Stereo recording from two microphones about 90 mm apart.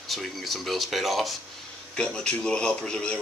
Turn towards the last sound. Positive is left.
turn(degrees=10)  # may be behind; listen again after turning